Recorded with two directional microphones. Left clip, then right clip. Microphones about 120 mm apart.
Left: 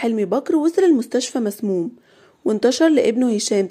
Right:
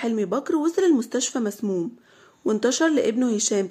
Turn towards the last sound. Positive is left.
turn(degrees=25)  # may be behind; listen again after turning